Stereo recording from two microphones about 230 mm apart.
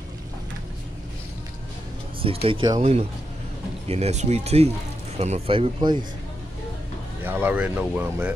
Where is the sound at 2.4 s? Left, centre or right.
Centre.